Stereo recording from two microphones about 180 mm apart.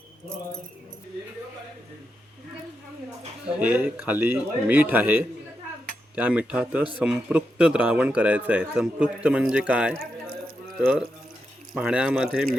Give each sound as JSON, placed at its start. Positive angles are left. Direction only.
{"t": 3.4, "sound": "a man's voice", "side_deg": -10}
{"t": 9.9, "sound": "a sound", "side_deg": -55}
{"t": 10.8, "sound": "speech", "side_deg": -5}